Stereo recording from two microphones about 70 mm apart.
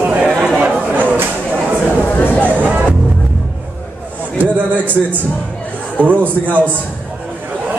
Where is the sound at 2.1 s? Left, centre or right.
Left.